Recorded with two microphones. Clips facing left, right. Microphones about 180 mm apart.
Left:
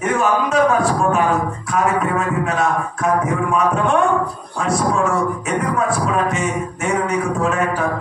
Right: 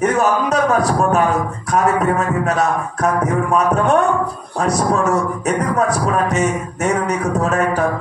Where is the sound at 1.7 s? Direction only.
40° right (ahead or behind).